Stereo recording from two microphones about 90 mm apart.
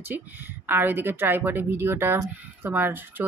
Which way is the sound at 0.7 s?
25° right (ahead or behind).